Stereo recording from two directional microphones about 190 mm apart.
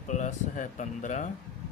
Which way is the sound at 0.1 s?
40° left (ahead or behind).